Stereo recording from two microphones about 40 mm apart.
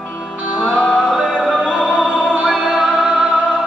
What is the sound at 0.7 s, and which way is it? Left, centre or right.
Music, centre.